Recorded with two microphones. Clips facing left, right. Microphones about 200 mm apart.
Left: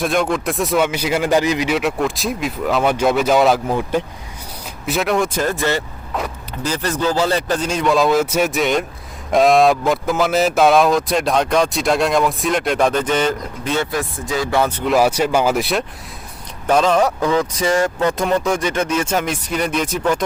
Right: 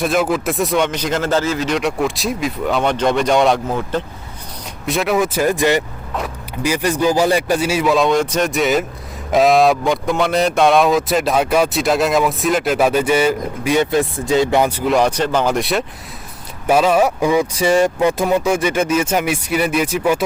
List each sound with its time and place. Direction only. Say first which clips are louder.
0.0 s speech: right 1 dB; centre (ahead or behind)
4.9 s speech: right 1 dB; centre (ahead or behind)
13.9 s speech: right 6 dB; 25° right (ahead or behind)
14.8 s speech: even; 5° left (ahead or behind)